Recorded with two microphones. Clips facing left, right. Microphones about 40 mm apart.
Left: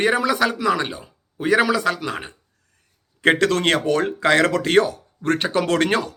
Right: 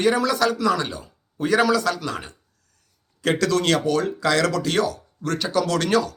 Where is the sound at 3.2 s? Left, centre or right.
Left.